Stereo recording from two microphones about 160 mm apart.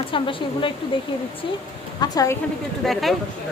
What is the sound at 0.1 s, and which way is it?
Speech, 30° left (ahead or behind).